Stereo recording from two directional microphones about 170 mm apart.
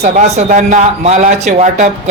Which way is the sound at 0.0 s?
45° right (ahead or behind).